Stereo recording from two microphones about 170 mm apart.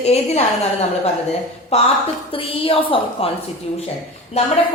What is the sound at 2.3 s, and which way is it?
Speech, 30° left (ahead or behind).